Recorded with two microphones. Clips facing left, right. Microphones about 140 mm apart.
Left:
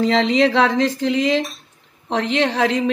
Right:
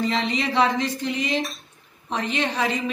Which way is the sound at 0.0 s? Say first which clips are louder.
Left 8 dB; 90° left.